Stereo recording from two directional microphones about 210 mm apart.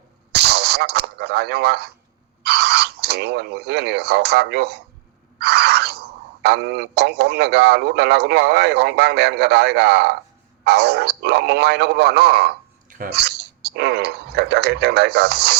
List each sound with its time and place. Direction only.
0.3 s speech: 50° right (ahead or behind)
5.4 s a sound: 50° right (ahead or behind)
6.4 s speech: 50° right (ahead or behind)